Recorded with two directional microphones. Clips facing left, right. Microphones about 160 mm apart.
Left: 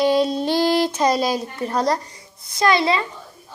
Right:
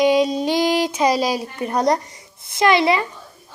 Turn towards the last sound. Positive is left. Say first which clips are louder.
# right 2 dB
turn(degrees=-20)  # may be behind; listen again after turning